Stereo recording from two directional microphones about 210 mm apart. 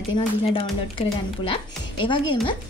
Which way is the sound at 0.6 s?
25° left (ahead or behind).